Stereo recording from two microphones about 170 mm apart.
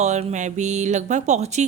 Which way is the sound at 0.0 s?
40° right (ahead or behind).